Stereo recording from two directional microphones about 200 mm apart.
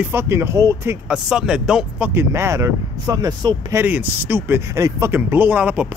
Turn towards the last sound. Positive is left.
turn(degrees=-5)  # may be behind; listen again after turning